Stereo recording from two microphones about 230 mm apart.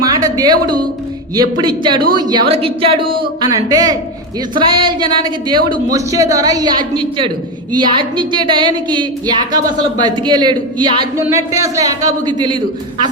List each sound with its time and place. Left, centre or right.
0.0 s music: centre
1.4 s a woman's voice: centre